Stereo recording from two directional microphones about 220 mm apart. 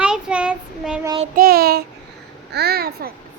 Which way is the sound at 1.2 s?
40° right (ahead or behind).